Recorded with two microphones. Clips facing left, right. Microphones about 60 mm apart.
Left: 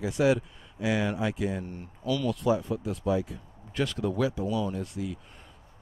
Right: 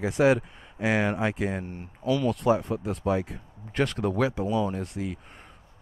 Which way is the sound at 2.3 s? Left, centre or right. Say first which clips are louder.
Right 3 dB; right.